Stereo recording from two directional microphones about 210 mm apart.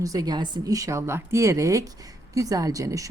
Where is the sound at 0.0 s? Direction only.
20° right (ahead or behind).